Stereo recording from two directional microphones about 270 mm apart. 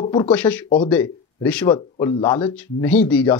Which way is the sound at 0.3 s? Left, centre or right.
Centre.